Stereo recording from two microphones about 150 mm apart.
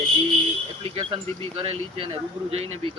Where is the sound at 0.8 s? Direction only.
35° right (ahead or behind).